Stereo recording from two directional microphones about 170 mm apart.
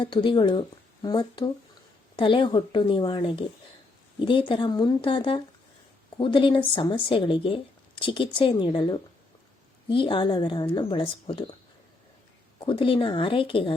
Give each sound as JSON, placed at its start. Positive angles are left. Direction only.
{"t": 0.0, "sound": "speech", "side_deg": 30}
{"t": 12.5, "sound": "speech", "side_deg": 30}